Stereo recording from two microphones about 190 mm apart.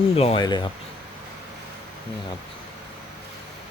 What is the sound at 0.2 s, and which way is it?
Speech, 30° left (ahead or behind).